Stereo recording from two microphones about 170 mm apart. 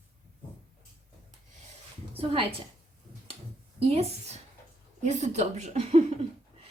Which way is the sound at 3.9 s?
40° right (ahead or behind).